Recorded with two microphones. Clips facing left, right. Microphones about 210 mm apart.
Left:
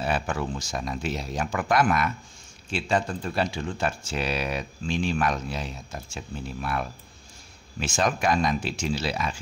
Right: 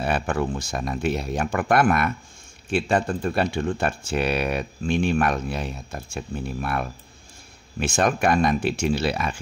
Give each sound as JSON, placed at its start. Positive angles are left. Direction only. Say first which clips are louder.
{"t": 0.0, "sound": "speech", "louder": "right 4 dB", "side_deg": -55}